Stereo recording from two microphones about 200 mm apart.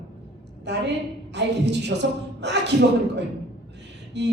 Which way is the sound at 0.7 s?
60° right (ahead or behind).